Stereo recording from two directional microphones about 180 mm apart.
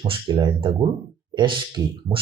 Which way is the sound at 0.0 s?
25° right (ahead or behind).